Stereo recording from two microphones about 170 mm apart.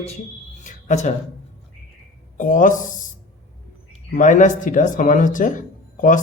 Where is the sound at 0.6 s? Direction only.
45° left (ahead or behind).